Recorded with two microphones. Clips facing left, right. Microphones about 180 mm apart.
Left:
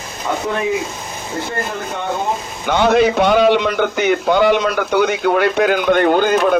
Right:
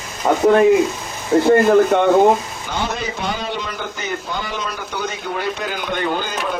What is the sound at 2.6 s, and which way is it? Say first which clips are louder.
A man's voice: left 17 dB; 70° left (ahead or behind).